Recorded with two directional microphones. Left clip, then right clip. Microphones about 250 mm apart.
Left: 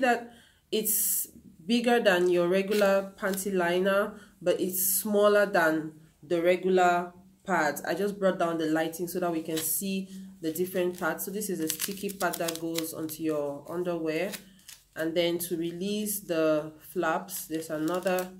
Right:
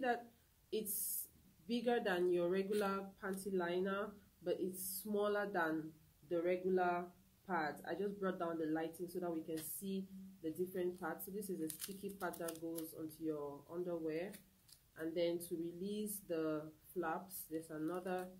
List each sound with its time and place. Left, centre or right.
1.7 s speech: centre